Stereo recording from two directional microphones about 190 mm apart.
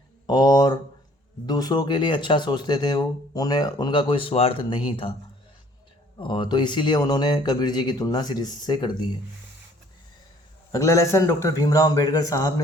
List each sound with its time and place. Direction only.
0.3 s speech: 20° left (ahead or behind)
6.1 s speech: 25° left (ahead or behind)
10.7 s a man's voice: 15° left (ahead or behind)